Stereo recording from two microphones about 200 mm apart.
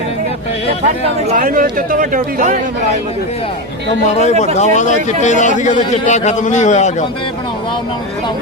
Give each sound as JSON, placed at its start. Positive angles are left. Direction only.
{"t": 1.4, "sound": "speech", "side_deg": -45}
{"t": 4.5, "sound": "a man's voice", "side_deg": 35}